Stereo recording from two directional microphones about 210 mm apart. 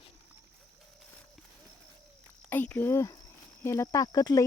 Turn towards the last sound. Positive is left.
turn(degrees=15)  # may be behind; listen again after turning